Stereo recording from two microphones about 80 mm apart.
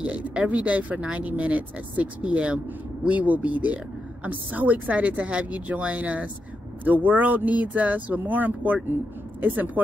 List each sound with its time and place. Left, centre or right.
0.0 s speech: centre